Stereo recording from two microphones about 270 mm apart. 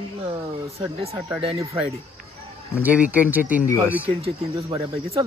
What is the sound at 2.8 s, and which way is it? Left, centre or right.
Speech, centre.